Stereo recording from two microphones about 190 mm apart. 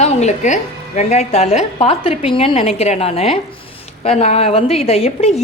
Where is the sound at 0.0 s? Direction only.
35° left (ahead or behind).